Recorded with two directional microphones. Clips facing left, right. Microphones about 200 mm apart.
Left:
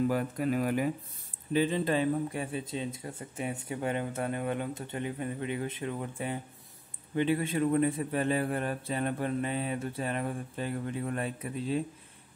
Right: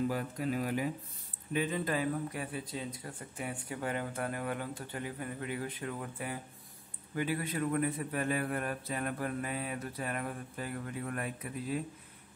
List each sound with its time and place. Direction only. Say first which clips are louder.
0.1 s speech: left 5 dB; 55° left (ahead or behind)
1.5 s a man's voice: left 5 dB; 30° left (ahead or behind)